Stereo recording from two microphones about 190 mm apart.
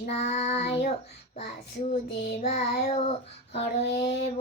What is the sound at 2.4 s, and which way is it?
Child singing, 40° left (ahead or behind).